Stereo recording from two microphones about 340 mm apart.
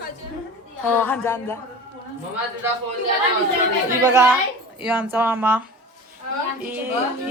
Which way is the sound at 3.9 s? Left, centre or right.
Centre.